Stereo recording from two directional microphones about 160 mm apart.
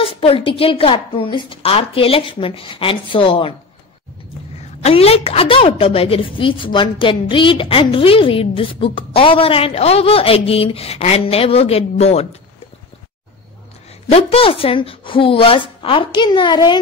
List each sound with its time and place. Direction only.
0.2 s a woman's voice: 35° left (ahead or behind)
4.8 s a woman's voice: 40° left (ahead or behind)
14.1 s a woman's voice: 35° left (ahead or behind)